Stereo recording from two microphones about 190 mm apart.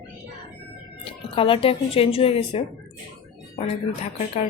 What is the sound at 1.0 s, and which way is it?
Speech, 30° left (ahead or behind).